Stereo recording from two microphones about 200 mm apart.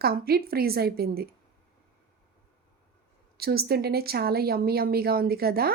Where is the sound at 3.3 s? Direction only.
50° right (ahead or behind).